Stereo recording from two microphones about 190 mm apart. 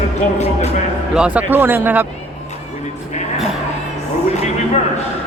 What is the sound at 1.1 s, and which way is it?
Speech, 5° right (ahead or behind).